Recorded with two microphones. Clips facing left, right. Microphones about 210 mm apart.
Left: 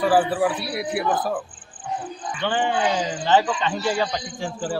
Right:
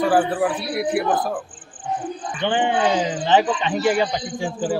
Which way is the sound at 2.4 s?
20° right (ahead or behind).